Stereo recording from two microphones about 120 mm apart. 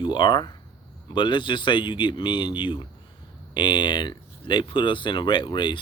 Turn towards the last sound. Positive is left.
turn(degrees=40)  # may be behind; listen again after turning